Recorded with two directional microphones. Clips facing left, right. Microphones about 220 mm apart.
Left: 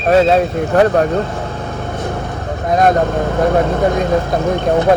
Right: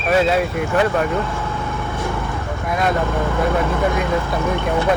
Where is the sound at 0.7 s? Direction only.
45° left (ahead or behind).